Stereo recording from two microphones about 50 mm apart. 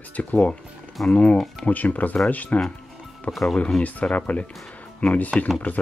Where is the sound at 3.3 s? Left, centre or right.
Centre.